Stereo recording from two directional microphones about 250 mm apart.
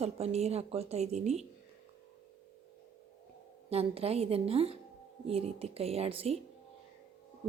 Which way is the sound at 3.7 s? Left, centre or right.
Right.